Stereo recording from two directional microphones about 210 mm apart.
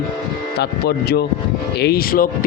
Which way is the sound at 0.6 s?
50° left (ahead or behind).